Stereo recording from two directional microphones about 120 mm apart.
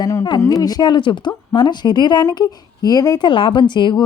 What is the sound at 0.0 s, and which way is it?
A woman's voice, 25° left (ahead or behind).